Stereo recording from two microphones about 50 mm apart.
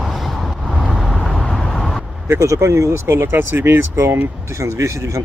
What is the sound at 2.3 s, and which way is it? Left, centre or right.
Speech, right.